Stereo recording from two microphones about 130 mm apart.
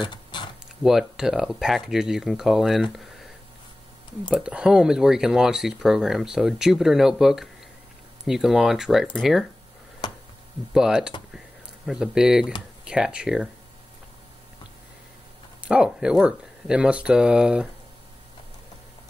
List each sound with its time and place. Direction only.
0.0 s a sound: 35° left (ahead or behind)
0.8 s speech: 5° right (ahead or behind)
4.3 s speech: 5° right (ahead or behind)
10.7 s speech: 5° right (ahead or behind)
11.3 s a sound: 5° right (ahead or behind)
12.8 s speech: 5° right (ahead or behind)
15.6 s speech: 5° right (ahead or behind)